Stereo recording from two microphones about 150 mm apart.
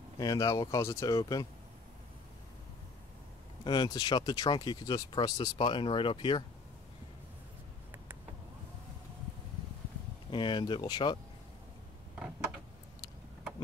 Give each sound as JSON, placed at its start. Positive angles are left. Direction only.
{"t": 0.2, "sound": "speech", "side_deg": 20}
{"t": 3.6, "sound": "speech", "side_deg": 30}
{"t": 10.3, "sound": "speech", "side_deg": 30}